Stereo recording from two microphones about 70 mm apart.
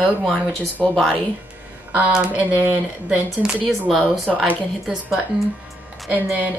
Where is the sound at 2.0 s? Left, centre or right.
Centre.